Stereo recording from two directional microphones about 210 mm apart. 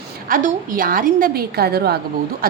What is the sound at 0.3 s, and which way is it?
A woman's voice, 40° right (ahead or behind).